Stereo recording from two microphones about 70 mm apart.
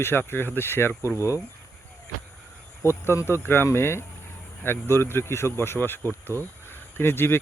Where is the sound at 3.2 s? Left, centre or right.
Left.